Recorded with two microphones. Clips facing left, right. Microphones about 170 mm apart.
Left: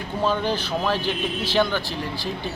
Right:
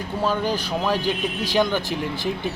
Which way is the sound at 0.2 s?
10° right (ahead or behind).